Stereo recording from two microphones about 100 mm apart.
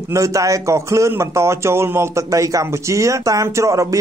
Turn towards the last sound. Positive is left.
turn(degrees=-30)  # may be behind; listen again after turning